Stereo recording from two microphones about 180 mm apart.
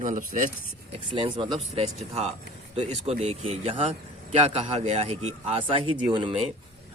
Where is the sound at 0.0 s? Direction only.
45° right (ahead or behind).